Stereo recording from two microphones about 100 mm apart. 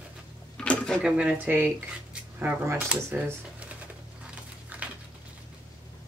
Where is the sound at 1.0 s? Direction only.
10° right (ahead or behind).